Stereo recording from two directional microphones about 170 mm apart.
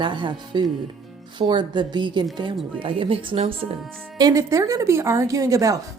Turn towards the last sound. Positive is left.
turn(degrees=-20)  # may be behind; listen again after turning